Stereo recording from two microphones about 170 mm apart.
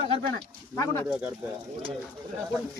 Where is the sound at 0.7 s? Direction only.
20° left (ahead or behind).